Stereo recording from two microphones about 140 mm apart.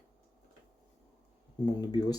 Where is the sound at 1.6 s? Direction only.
30° left (ahead or behind).